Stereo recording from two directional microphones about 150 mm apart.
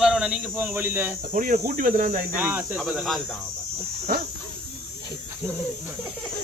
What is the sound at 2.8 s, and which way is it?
Speech, centre (ahead or behind).